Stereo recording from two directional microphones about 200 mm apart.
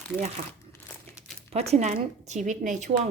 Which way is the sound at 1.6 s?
35° right (ahead or behind).